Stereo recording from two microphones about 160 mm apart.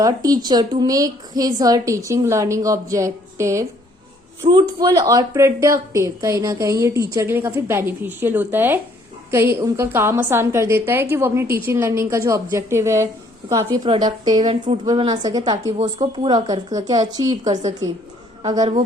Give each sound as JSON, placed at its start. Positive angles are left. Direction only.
{"t": 0.0, "sound": "a woman's voice", "side_deg": -25}
{"t": 14.4, "sound": "speech", "side_deg": -40}
{"t": 15.1, "sound": "speech", "side_deg": -25}